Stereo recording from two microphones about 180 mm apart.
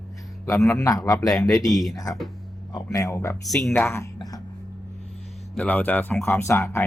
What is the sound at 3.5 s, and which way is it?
Speech, centre (ahead or behind).